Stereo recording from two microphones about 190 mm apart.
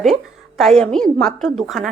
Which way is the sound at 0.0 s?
Centre (ahead or behind).